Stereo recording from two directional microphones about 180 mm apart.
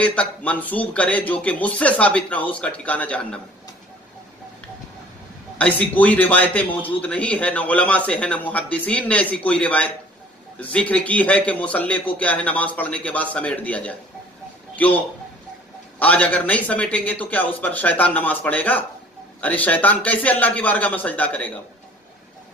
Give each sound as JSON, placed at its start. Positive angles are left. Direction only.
{"t": 0.0, "sound": "a man's voice", "side_deg": 5}
{"t": 5.6, "sound": "a man's voice", "side_deg": 10}
{"t": 16.0, "sound": "a man's voice", "side_deg": 10}